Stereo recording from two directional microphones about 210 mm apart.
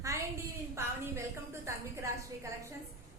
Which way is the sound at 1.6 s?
15° right (ahead or behind).